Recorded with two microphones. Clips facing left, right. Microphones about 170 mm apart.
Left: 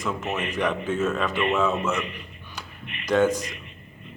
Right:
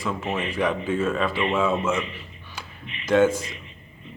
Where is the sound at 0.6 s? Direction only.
5° right (ahead or behind).